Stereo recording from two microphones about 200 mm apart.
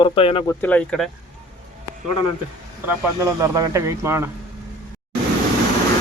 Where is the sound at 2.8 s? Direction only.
15° right (ahead or behind).